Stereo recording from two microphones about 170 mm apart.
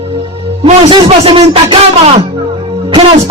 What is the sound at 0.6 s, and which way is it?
A man's voice, 35° right (ahead or behind).